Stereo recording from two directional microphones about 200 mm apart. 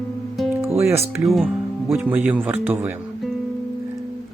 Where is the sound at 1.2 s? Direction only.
Centre (ahead or behind).